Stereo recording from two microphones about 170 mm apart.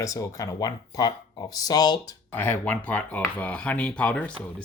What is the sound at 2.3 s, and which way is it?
Speech, 10° left (ahead or behind).